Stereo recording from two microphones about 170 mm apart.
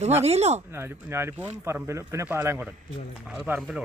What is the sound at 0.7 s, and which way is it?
Speech, 15° right (ahead or behind).